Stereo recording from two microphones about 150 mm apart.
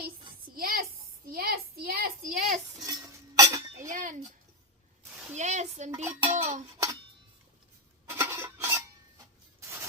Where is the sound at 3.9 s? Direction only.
60° right (ahead or behind).